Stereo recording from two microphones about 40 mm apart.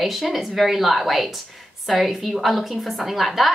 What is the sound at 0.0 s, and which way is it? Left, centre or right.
A woman's voice, centre.